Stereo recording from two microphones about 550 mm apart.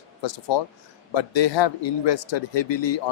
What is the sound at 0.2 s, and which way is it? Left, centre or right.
A man's voice, left.